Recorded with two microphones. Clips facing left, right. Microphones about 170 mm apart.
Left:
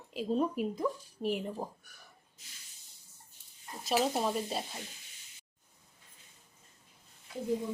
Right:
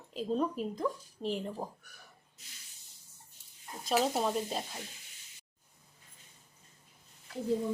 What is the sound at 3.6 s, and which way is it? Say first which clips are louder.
A woman's voice: even; centre (ahead or behind).